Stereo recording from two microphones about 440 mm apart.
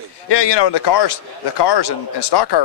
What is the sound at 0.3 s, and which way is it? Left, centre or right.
Speech, left.